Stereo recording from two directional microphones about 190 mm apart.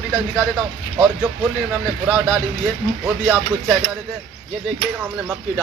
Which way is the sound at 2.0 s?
10° right (ahead or behind).